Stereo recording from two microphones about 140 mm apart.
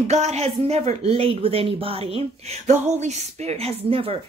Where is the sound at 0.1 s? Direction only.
50° right (ahead or behind).